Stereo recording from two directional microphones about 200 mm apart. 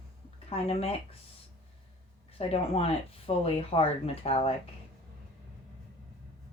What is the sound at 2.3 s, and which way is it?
Speech, 30° left (ahead or behind).